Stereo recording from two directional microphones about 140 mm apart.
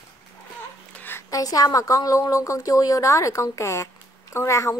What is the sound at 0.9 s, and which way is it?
A woman's voice, 15° left (ahead or behind).